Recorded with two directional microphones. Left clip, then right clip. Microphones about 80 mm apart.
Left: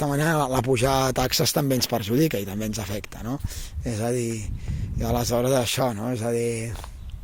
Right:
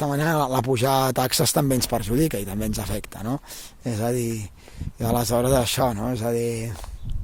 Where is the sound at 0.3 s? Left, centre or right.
Right.